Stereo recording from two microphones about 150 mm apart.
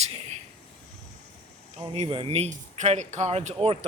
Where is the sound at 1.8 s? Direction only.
40° right (ahead or behind).